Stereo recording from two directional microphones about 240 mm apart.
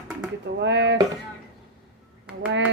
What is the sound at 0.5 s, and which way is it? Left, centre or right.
Speech, right.